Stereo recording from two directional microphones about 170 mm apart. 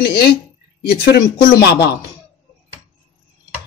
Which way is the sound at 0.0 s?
65° left (ahead or behind).